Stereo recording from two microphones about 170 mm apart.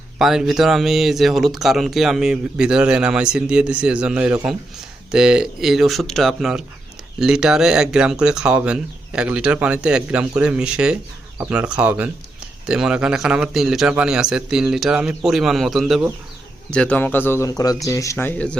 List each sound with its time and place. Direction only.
0.2 s speech: centre (ahead or behind)